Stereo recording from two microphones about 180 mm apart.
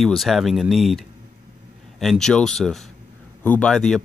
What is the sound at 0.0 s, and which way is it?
Speech, centre (ahead or behind).